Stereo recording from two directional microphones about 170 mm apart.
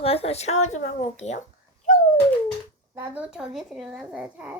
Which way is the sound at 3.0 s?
10° right (ahead or behind).